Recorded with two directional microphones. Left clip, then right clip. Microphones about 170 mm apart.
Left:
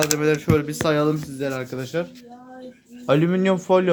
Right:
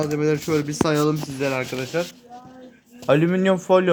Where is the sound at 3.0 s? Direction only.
Centre (ahead or behind).